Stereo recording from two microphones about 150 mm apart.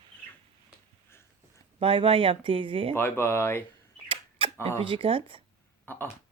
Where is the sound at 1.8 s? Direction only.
35° right (ahead or behind).